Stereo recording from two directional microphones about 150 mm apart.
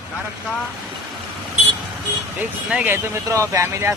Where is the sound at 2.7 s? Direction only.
10° right (ahead or behind).